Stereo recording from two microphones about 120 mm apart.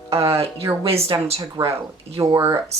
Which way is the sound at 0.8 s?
55° right (ahead or behind).